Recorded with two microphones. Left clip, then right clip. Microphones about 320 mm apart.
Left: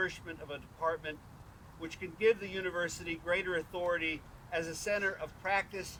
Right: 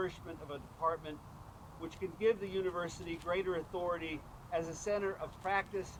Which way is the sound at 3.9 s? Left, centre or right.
Centre.